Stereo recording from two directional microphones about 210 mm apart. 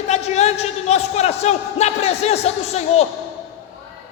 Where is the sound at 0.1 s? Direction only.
30° left (ahead or behind).